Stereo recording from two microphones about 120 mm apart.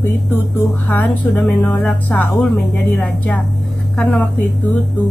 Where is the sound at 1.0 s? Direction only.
10° left (ahead or behind).